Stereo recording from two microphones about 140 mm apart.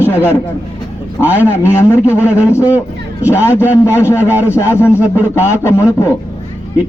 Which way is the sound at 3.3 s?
15° left (ahead or behind).